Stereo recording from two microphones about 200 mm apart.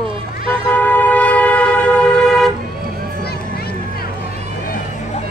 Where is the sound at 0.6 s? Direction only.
10° left (ahead or behind).